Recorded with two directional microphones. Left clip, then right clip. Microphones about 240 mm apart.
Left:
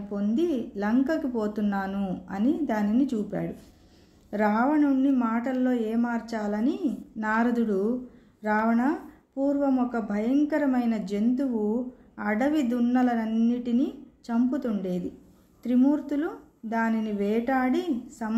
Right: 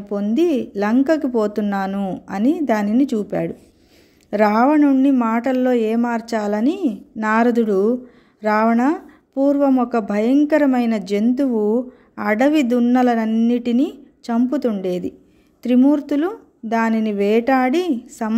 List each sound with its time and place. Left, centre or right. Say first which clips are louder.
0.1 s speech: right 9 dB; right